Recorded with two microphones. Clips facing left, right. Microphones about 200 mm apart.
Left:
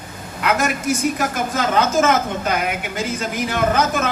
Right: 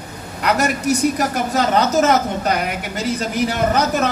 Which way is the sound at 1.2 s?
40° right (ahead or behind).